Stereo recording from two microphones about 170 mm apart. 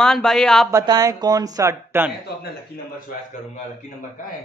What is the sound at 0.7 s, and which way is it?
Speech, 20° right (ahead or behind).